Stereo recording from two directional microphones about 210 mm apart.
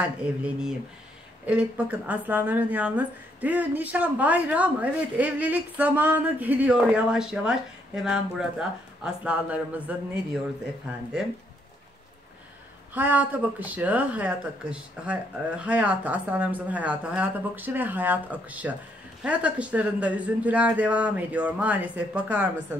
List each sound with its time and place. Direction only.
0.2 s speech: 5° right (ahead or behind)
12.9 s speech: 10° right (ahead or behind)